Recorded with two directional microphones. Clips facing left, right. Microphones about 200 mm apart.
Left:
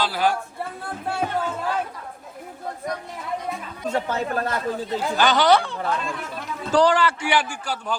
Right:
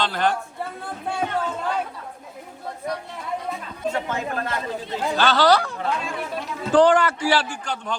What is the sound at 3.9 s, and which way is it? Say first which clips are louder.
Speech: left 3 dB; 40° left (ahead or behind).